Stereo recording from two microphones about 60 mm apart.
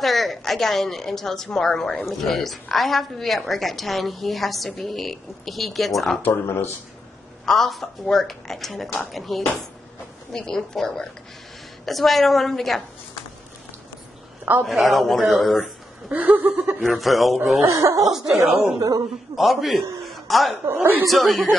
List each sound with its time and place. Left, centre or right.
0.0 s a woman's voice: centre
6.2 s speech: left
7.4 s a woman's voice: centre
14.6 s a woman's voice: centre
16.1 s a sound: right
16.8 s a woman's voice: centre
17.6 s speech: right
18.8 s a man's voice: right
19.3 s a woman's voice: centre
20.1 s a sound: centre
20.6 s speech: right
21.1 s a woman's voice: centre